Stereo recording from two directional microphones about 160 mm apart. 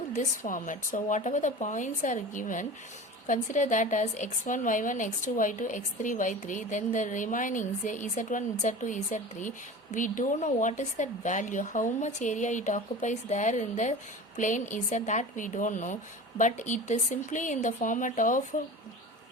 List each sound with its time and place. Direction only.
0.2 s a woman's voice: 55° left (ahead or behind)